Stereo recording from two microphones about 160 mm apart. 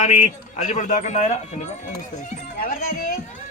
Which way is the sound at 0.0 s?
50° left (ahead or behind).